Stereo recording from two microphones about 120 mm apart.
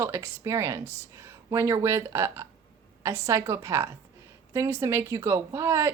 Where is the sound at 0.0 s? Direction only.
20° right (ahead or behind).